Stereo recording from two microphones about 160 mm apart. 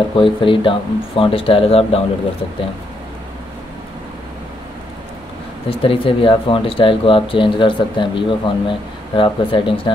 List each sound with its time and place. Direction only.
0.1 s speech: 30° left (ahead or behind)
5.7 s speech: 35° left (ahead or behind)